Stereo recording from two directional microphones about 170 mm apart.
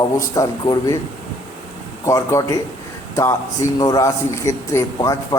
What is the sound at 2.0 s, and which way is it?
Speech, 20° left (ahead or behind).